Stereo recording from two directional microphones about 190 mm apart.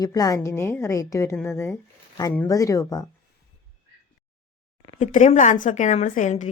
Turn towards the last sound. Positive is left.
turn(degrees=40)  # may be behind; listen again after turning